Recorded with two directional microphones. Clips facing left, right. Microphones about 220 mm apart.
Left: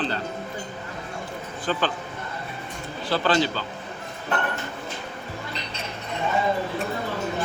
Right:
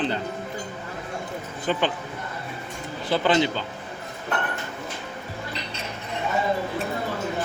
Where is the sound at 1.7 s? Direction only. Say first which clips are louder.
Right 1 dB; 15° right (ahead or behind).